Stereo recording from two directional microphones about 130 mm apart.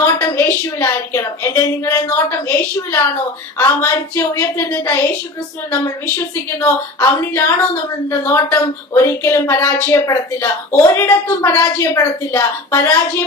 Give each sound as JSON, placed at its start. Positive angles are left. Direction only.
{"t": 0.0, "sound": "speech", "side_deg": 25}